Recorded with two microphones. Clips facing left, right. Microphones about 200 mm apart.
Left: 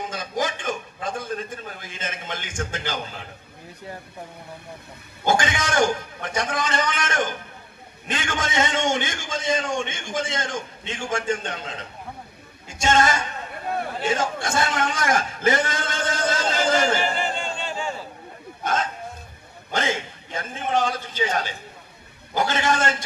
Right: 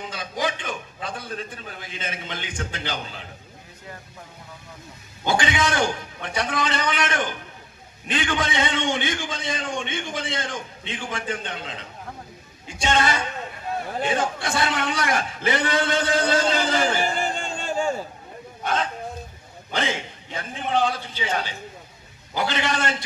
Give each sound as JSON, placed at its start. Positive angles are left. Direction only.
{"t": 0.1, "sound": "a man's voice", "side_deg": 45}
{"t": 5.2, "sound": "a man's voice", "side_deg": 45}
{"t": 17.0, "sound": "a sound", "side_deg": -45}
{"t": 18.6, "sound": "a man's voice", "side_deg": 45}